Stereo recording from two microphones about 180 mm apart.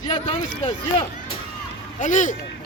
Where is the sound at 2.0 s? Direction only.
45° left (ahead or behind).